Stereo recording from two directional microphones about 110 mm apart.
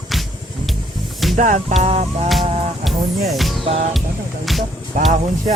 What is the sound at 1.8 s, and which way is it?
Music, 80° right.